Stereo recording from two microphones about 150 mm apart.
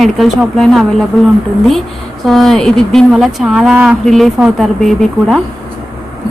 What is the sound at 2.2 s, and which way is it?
A woman's voice, centre (ahead or behind).